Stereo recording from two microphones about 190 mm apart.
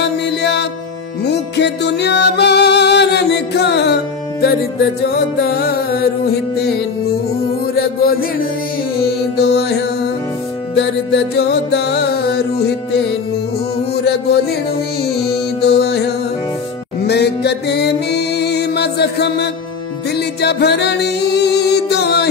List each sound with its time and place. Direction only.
0.0 s music: 65° left (ahead or behind)
7.7 s music: 50° left (ahead or behind)
9.5 s music: 60° left (ahead or behind)
11.3 s music: 60° left (ahead or behind)
15.6 s music: 60° left (ahead or behind)
17.0 s music: 60° left (ahead or behind)